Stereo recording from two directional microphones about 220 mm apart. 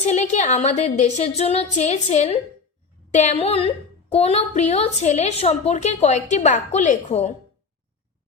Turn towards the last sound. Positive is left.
turn(degrees=30)  # may be behind; listen again after turning